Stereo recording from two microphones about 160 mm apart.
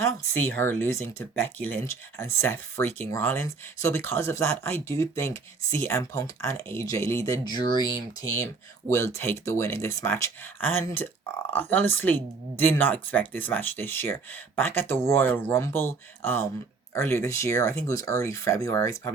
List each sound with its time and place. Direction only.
0.0 s speech: 15° left (ahead or behind)